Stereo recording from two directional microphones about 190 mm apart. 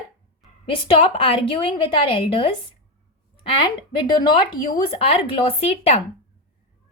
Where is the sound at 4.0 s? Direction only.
25° left (ahead or behind).